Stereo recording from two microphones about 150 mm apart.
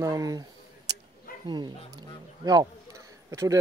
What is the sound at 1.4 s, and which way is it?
Speech, 30° right (ahead or behind).